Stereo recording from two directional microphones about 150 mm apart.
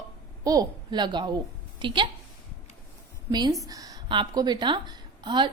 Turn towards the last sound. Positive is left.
turn(degrees=-30)  # may be behind; listen again after turning